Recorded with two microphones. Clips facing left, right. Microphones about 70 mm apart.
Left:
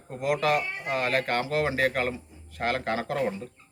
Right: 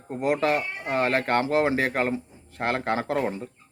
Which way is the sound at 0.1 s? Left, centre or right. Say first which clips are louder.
Right 2 dB; right.